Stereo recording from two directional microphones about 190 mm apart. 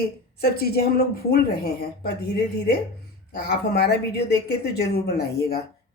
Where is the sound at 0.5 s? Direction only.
55° left (ahead or behind).